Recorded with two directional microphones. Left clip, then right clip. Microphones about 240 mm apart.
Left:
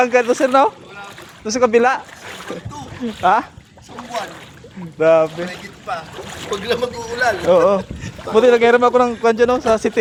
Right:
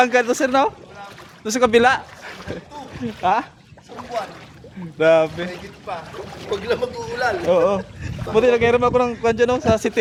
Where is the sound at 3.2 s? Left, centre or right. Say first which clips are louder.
Left 4 dB; centre.